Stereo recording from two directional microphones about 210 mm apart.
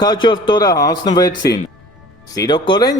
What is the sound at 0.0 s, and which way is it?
Speech, 20° left (ahead or behind).